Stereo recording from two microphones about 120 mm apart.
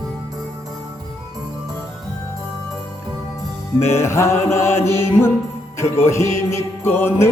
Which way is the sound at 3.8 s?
20° left (ahead or behind).